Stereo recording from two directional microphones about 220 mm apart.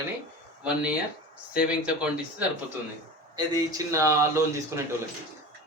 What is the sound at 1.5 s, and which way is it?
Speech, 5° right (ahead or behind).